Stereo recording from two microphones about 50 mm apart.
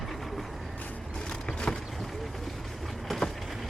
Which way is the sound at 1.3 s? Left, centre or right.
Centre.